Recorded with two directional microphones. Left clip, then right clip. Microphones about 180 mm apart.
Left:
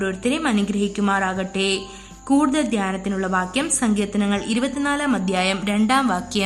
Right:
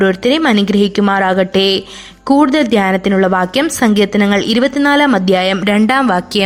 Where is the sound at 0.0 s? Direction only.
45° right (ahead or behind).